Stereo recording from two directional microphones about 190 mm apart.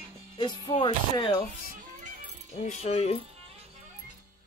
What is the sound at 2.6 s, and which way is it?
Speech, 35° left (ahead or behind).